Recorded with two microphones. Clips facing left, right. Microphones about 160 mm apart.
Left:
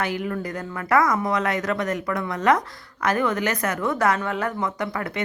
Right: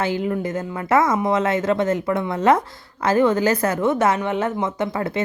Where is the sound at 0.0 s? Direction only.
25° right (ahead or behind).